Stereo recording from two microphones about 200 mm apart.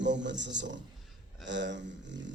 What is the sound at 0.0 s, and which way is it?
Speech, 60° right (ahead or behind).